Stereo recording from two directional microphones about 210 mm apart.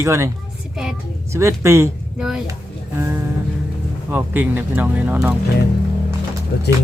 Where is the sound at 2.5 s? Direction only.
10° right (ahead or behind).